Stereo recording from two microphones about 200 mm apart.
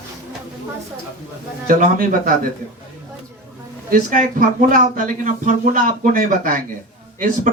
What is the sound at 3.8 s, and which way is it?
Speech, 40° right (ahead or behind).